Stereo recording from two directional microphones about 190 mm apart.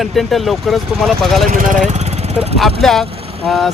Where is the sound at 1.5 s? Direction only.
40° right (ahead or behind).